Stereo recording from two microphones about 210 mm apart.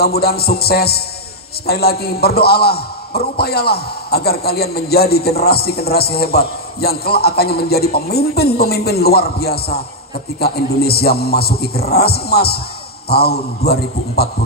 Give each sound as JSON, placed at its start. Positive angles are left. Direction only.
{"t": 0.0, "sound": "a man's voice", "side_deg": 50}